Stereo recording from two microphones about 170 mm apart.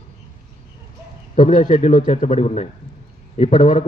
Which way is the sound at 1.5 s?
30° left (ahead or behind).